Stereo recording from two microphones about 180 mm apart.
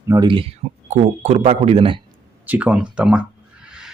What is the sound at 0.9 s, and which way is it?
A man's voice, 40° right (ahead or behind).